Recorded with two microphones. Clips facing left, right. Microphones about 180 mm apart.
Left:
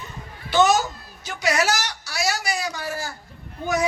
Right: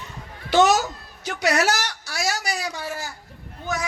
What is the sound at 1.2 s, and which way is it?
A woman's voice, 70° right (ahead or behind).